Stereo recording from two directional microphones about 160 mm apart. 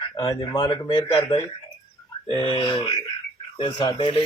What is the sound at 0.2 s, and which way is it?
Speech, 25° left (ahead or behind).